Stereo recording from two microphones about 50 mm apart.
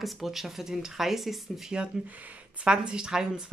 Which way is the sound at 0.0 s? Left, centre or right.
Centre.